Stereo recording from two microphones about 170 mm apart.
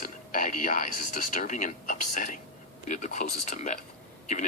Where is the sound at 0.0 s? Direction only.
50° left (ahead or behind).